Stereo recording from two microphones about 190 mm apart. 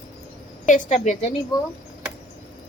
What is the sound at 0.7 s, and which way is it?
Speech, 40° left (ahead or behind).